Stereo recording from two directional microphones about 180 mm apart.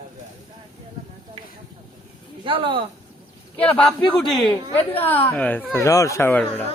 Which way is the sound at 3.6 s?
5° left (ahead or behind).